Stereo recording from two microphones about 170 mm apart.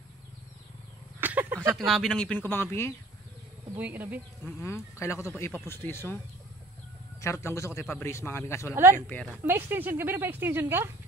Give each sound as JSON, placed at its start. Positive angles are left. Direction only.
{"t": 1.2, "sound": "a sound", "side_deg": -10}
{"t": 1.8, "sound": "speech", "side_deg": 0}
{"t": 3.7, "sound": "speech", "side_deg": -10}
{"t": 4.5, "sound": "speech", "side_deg": 15}
{"t": 7.2, "sound": "speech", "side_deg": 15}
{"t": 9.3, "sound": "speech", "side_deg": -15}